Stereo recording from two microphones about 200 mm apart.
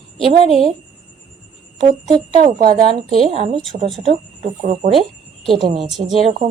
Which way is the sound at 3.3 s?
35° right (ahead or behind).